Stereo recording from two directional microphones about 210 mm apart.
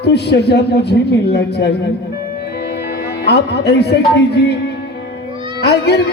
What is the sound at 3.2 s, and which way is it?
Speech, 50° left (ahead or behind).